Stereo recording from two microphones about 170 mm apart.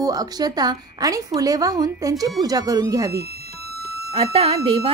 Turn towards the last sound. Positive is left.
turn(degrees=-30)  # may be behind; listen again after turning